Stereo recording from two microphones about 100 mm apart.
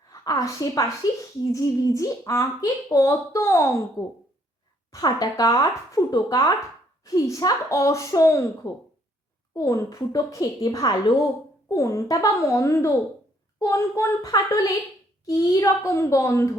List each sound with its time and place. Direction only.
0.1 s speech: 35° left (ahead or behind)
4.9 s speech: 40° left (ahead or behind)